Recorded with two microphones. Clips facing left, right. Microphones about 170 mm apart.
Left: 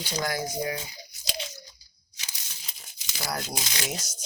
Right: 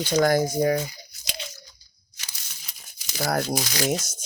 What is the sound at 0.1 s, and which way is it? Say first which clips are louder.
Speech: right 11 dB; 50° right (ahead or behind).